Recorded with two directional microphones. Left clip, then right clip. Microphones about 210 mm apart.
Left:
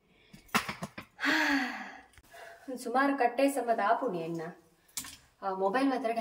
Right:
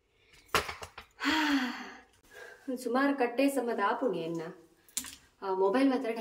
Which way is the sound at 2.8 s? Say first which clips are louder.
Left 2 dB; centre (ahead or behind).